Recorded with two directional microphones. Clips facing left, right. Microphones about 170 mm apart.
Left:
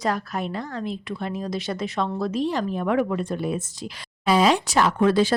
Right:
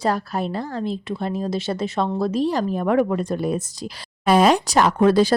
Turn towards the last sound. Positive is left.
turn(degrees=-40)  # may be behind; listen again after turning